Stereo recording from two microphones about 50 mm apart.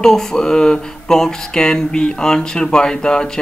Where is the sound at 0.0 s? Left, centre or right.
Centre.